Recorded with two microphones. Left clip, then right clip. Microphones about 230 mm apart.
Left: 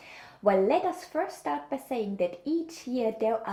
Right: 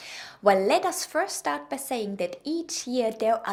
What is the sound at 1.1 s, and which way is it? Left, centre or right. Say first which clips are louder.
A woman's voice: right 3 dB; right.